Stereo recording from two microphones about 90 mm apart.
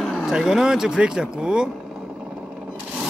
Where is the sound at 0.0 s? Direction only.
5° right (ahead or behind).